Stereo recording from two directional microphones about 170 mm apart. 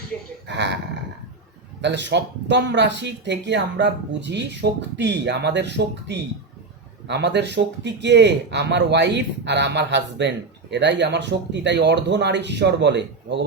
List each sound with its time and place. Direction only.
0.1 s speech: 5° left (ahead or behind)
0.4 s speech: 90° right
1.8 s speech: 90° right